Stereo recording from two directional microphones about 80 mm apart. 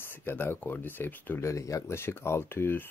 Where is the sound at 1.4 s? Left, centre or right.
Left.